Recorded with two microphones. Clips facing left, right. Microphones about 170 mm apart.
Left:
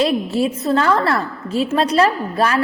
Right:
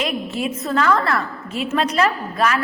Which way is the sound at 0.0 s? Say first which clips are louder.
Left 6 dB; 35° left (ahead or behind).